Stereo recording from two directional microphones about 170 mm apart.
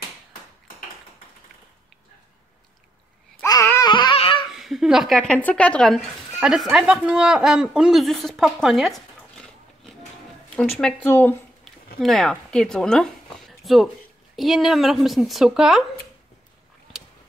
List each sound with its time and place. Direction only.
3.4 s babbling: 20° left (ahead or behind)
3.9 s a sound: 30° left (ahead or behind)
4.5 s a woman's voice: centre (ahead or behind)
11.1 s speech: 10° left (ahead or behind)